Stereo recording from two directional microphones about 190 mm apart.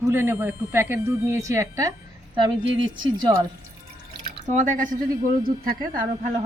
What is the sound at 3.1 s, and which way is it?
Speech, 20° right (ahead or behind).